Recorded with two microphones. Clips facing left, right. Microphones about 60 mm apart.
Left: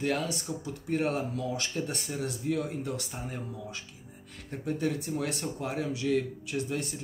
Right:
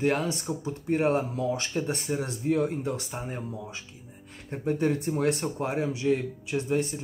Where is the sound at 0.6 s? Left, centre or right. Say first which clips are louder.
Right 5 dB; right.